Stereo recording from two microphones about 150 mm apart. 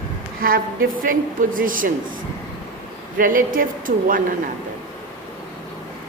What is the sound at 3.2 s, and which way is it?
A man's voice, 65° right (ahead or behind).